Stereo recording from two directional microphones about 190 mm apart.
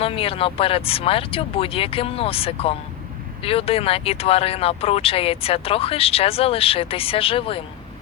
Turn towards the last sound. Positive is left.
turn(degrees=30)  # may be behind; listen again after turning